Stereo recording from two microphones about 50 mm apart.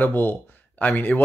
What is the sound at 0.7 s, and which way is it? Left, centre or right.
Speech, left.